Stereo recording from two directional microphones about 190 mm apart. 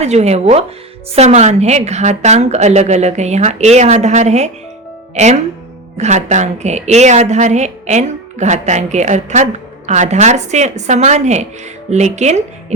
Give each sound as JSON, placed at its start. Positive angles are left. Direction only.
{"t": 0.0, "sound": "a woman's voice", "side_deg": -35}